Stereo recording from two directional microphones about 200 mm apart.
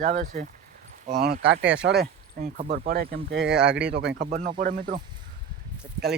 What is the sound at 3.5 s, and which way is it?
Speech, 5° right (ahead or behind).